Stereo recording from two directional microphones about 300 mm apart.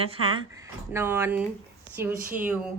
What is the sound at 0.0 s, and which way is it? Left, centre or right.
A woman's voice, centre.